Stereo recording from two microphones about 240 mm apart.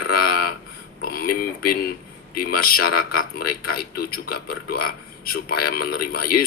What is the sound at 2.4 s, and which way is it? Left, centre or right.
A man's voice, left.